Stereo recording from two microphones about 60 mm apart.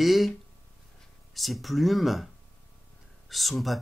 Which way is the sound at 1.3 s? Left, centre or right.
Centre.